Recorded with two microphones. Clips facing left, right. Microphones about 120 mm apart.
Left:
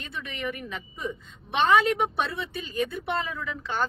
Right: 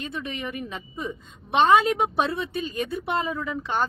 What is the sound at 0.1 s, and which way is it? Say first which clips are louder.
A woman's voice: right 2 dB; 20° right (ahead or behind).